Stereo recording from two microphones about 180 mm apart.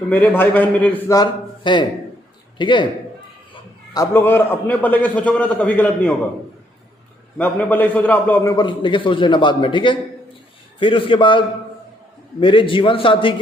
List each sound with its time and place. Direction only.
0.1 s a man's voice: 10° left (ahead or behind); by 2.8 s 25° left (ahead or behind)
3.9 s a man's voice: 15° left (ahead or behind)
7.3 s a man's voice: 10° left (ahead or behind)
8.5 s a man's voice: 25° left (ahead or behind)